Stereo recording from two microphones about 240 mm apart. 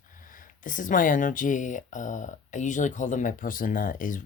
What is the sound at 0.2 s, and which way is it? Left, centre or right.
Speech, left.